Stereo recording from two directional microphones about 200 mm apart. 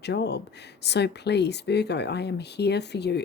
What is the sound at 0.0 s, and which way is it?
Speech, 55° left (ahead or behind).